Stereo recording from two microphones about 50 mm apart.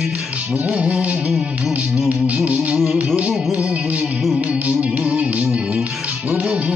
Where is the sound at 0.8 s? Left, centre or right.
Right.